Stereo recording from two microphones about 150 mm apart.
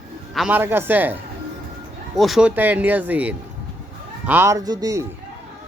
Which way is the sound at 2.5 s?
10° right (ahead or behind).